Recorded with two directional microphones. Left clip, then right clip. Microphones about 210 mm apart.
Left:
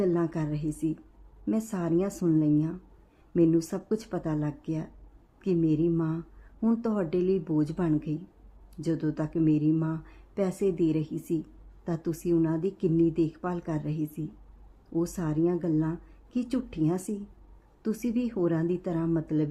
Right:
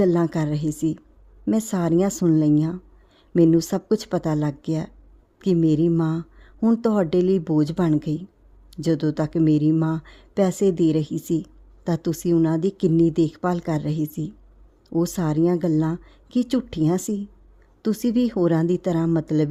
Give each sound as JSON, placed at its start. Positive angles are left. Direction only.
{"t": 0.0, "sound": "speech", "side_deg": -40}